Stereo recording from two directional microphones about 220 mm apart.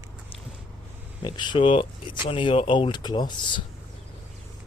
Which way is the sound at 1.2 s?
20° left (ahead or behind).